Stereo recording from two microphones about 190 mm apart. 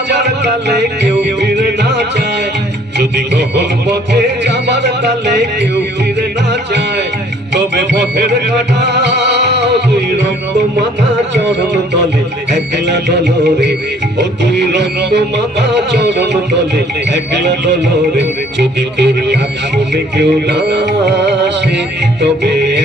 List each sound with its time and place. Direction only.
0.1 s music: 65° right (ahead or behind)
7.5 s music: 65° right (ahead or behind)
12.5 s music: 65° right (ahead or behind)